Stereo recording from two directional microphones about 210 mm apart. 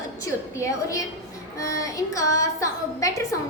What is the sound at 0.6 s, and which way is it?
A woman's voice, 15° left (ahead or behind).